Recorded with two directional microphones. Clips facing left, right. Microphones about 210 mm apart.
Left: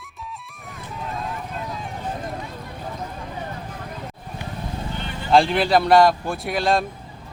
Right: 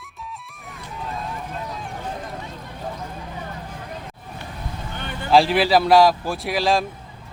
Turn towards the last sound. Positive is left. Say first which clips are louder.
# even
turn(degrees=0)  # may be behind; listen again after turning